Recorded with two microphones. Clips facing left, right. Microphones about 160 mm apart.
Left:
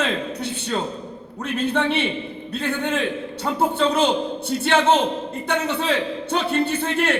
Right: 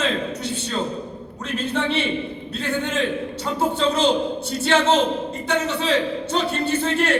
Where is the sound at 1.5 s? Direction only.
60° left (ahead or behind).